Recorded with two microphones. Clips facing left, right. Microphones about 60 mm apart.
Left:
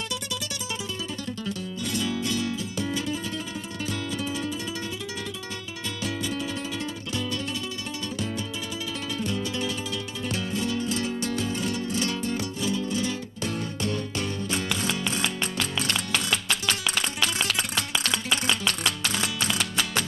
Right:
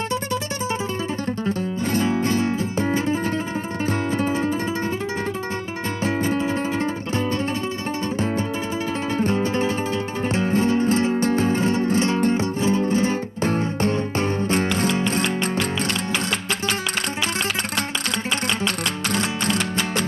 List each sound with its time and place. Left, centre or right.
1.4 s music: right
6.0 s music: right
9.1 s music: right
19.1 s music: right